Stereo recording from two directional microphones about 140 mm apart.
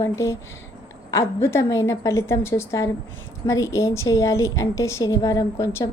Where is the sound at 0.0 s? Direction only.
20° left (ahead or behind).